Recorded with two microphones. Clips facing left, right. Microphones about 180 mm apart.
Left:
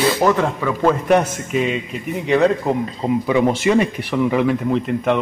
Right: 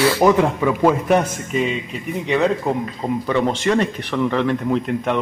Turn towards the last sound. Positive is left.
turn(degrees=0)  # may be behind; listen again after turning